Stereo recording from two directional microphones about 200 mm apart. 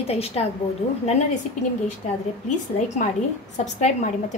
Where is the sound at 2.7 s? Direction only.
35° left (ahead or behind).